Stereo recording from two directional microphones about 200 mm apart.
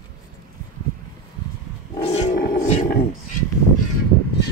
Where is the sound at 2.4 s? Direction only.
50° left (ahead or behind).